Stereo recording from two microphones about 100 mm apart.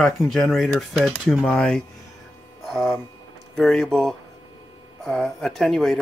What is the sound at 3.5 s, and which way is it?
Speech, 5° left (ahead or behind).